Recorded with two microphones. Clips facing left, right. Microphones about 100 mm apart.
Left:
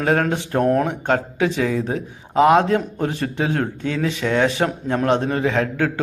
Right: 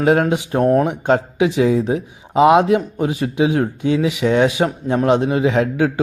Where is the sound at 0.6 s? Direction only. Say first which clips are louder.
Right 3 dB; centre (ahead or behind).